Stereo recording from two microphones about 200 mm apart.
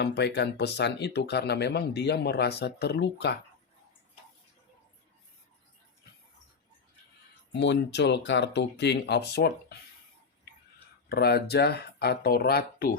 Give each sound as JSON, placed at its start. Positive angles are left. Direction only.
{"t": 0.0, "sound": "speech", "side_deg": 60}
{"t": 7.5, "sound": "speech", "side_deg": 60}
{"t": 11.1, "sound": "speech", "side_deg": 55}